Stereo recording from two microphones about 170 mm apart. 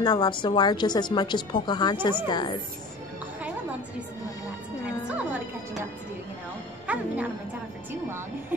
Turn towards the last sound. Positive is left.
turn(degrees=-10)  # may be behind; listen again after turning